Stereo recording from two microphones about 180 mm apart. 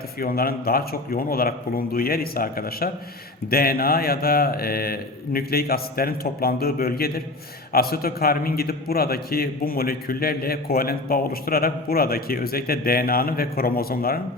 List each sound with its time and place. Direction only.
0.2 s a man's voice: 55° left (ahead or behind)